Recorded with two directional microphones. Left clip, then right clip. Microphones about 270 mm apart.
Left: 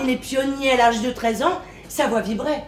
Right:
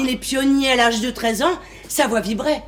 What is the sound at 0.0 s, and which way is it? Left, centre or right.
A woman's voice, right.